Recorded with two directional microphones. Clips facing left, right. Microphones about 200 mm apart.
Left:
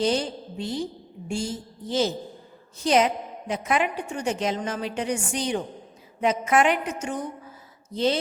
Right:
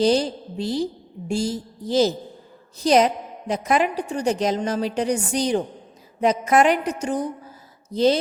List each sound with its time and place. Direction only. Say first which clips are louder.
0.0 s a woman's voice: right 5 dB; 35° right (ahead or behind)